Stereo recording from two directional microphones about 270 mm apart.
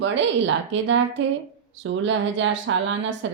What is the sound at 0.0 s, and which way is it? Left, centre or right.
A woman's voice, right.